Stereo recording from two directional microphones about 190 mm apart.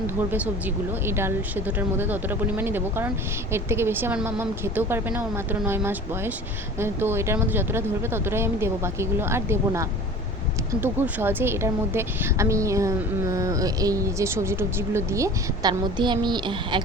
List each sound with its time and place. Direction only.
0.3 s a woman's voice: 10° right (ahead or behind); by 16.8 s 25° right (ahead or behind)